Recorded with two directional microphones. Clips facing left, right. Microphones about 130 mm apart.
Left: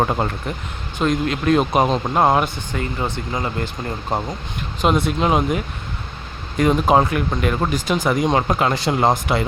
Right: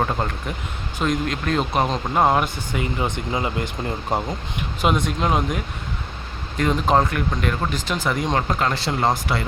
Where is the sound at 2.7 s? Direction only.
15° right (ahead or behind).